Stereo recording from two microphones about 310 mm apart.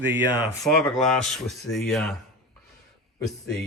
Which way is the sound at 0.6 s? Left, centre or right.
Centre.